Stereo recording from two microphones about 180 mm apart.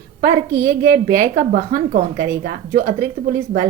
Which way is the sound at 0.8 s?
45° right (ahead or behind).